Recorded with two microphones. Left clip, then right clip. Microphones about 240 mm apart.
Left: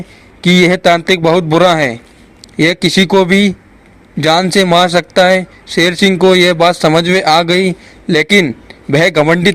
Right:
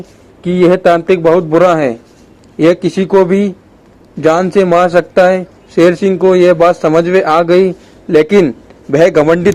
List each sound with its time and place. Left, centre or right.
0.5 s a man's voice: left